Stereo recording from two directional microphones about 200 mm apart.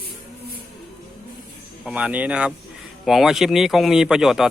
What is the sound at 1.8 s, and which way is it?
Speech, 5° right (ahead or behind).